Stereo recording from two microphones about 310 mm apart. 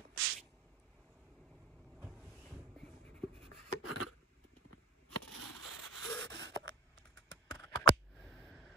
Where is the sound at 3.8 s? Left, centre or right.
Left.